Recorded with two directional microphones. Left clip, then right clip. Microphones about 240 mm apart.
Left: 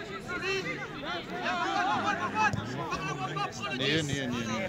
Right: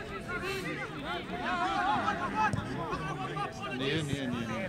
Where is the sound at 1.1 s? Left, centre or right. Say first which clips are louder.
Left 2 dB; left.